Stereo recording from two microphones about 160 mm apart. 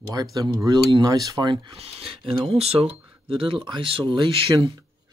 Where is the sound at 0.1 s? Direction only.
25° right (ahead or behind).